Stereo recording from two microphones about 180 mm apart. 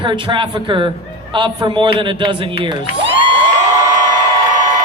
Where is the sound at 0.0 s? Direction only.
25° right (ahead or behind).